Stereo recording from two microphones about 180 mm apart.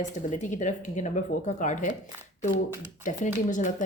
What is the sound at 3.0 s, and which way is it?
Speech, 45° left (ahead or behind).